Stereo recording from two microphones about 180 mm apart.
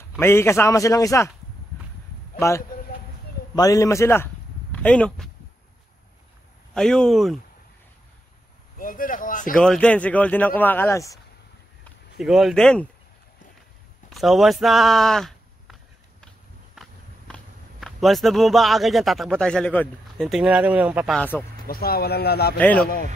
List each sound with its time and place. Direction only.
0.2 s speech: 15° left (ahead or behind)
2.4 s speech: 15° left (ahead or behind)
6.7 s speech: 5° left (ahead or behind)
8.7 s a sound: 50° left (ahead or behind)
9.6 s speech: 5° left (ahead or behind)
11.8 s speech: centre (ahead or behind)
14.1 s a sound: centre (ahead or behind)
17.3 s speech: centre (ahead or behind)
20.2 s speech: 5° right (ahead or behind)
21.2 s speech: 10° left (ahead or behind)
21.6 s speech: 55° left (ahead or behind)
22.6 s speech: 10° left (ahead or behind)